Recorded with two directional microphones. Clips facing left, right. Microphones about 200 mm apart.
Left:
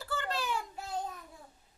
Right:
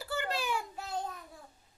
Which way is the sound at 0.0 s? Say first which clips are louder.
Right 1 dB; 10° right (ahead or behind).